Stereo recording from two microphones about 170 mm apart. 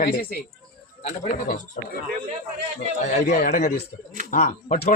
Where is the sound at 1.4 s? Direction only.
50° left (ahead or behind).